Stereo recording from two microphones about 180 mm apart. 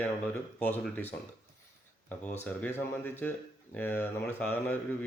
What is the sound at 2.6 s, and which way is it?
Speech, 10° left (ahead or behind).